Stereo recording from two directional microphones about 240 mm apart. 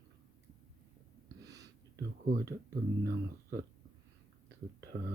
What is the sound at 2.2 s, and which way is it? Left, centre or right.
Speech, right.